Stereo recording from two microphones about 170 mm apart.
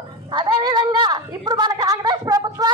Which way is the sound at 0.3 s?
25° right (ahead or behind).